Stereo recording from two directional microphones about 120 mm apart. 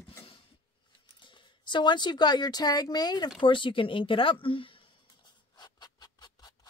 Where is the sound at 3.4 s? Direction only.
45° left (ahead or behind).